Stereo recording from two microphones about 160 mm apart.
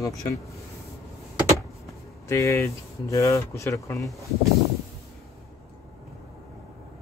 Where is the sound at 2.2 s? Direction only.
15° left (ahead or behind).